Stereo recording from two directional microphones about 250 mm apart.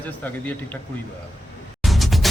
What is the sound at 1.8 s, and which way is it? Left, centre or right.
Music, centre.